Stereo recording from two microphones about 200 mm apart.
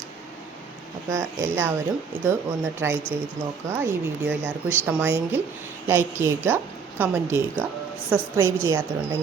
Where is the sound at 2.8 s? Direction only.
10° right (ahead or behind).